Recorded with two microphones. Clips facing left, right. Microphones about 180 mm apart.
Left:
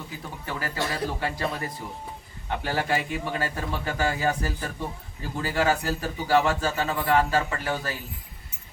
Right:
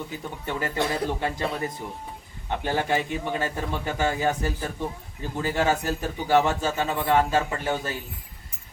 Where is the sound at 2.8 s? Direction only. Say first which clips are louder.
Right 2 dB; 20° right (ahead or behind).